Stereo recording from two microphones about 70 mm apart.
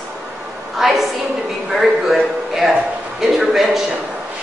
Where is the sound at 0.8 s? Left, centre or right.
Centre.